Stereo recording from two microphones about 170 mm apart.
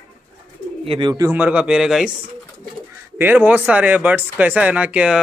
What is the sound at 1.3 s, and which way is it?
Speech, 10° right (ahead or behind).